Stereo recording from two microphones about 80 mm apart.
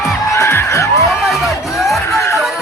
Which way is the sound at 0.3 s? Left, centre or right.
Left.